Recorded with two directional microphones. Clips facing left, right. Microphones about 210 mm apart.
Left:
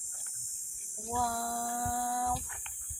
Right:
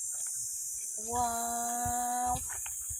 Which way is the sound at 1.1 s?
Centre (ahead or behind).